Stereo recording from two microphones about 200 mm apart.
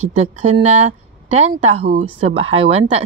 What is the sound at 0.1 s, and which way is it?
A woman's voice, 35° right (ahead or behind).